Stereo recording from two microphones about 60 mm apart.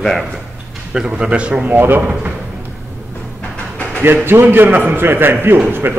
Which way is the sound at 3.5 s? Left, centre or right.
Left.